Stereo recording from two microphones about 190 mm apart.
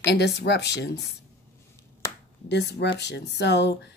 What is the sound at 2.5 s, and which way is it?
A woman's voice, 65° left (ahead or behind).